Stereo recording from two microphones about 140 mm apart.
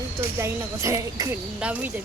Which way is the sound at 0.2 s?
20° right (ahead or behind).